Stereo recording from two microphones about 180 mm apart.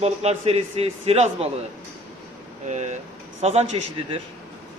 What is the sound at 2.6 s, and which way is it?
Speech, 40° right (ahead or behind).